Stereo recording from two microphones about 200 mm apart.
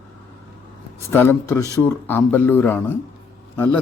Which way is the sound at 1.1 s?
10° left (ahead or behind).